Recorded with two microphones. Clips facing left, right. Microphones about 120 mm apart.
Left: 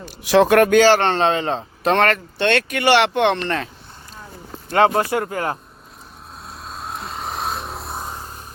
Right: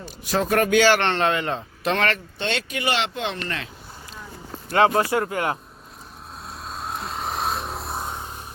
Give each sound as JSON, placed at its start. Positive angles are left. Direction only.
{"t": 0.3, "sound": "speech", "side_deg": 80}
{"t": 0.7, "sound": "speech", "side_deg": 40}
{"t": 2.4, "sound": "speech", "side_deg": 65}
{"t": 4.9, "sound": "speech", "side_deg": 30}
{"t": 6.5, "sound": "vehicle", "side_deg": 0}